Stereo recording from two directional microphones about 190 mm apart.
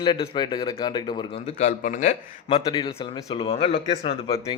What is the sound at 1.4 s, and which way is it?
Speech, 35° left (ahead or behind).